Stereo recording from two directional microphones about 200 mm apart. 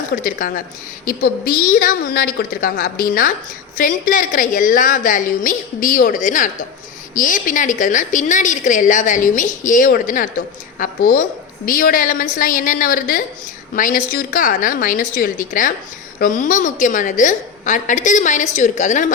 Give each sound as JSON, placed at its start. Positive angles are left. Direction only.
{"t": 0.2, "sound": "a woman's voice", "side_deg": 45}